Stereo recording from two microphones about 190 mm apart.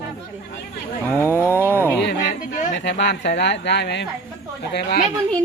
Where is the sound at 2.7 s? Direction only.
70° left (ahead or behind).